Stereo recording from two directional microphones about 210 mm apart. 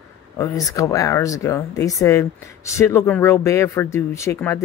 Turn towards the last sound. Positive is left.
turn(degrees=15)  # may be behind; listen again after turning